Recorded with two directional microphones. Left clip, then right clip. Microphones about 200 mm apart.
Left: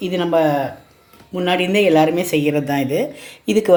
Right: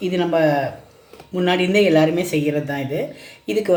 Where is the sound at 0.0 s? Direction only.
15° left (ahead or behind).